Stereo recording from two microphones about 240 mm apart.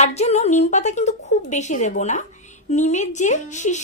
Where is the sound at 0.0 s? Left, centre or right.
Left.